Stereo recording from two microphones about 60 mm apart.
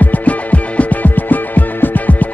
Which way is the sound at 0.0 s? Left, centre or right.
Left.